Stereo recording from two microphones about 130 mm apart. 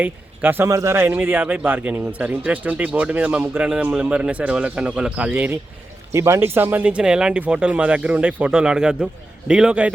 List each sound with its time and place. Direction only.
0.0 s a man's voice: 15° right (ahead or behind)